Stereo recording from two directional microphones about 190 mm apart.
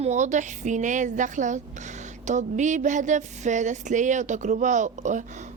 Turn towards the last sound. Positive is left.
turn(degrees=-40)  # may be behind; listen again after turning